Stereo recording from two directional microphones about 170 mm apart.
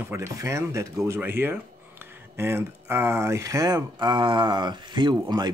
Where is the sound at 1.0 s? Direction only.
15° right (ahead or behind).